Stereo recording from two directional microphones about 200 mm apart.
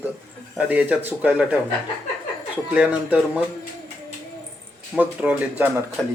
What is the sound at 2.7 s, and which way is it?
Speech, 5° right (ahead or behind).